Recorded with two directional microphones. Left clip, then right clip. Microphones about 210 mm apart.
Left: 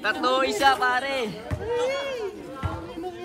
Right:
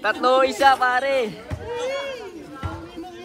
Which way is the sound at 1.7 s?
45° left (ahead or behind).